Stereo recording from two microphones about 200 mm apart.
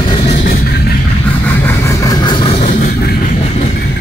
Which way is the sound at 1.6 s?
15° left (ahead or behind).